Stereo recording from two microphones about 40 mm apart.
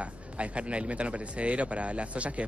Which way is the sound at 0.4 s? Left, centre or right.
Right.